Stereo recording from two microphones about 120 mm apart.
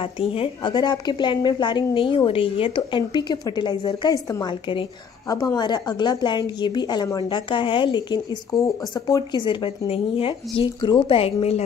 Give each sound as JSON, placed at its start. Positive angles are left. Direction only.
{"t": 0.0, "sound": "speech", "side_deg": 50}
{"t": 0.7, "sound": "a woman's voice", "side_deg": 35}